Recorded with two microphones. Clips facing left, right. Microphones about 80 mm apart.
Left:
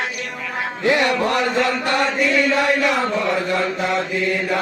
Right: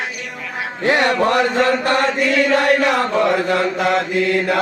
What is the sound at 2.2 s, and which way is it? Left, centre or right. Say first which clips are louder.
Chant: right 2 dB; right.